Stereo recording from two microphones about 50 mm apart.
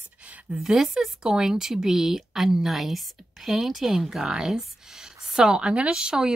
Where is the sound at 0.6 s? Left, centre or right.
Centre.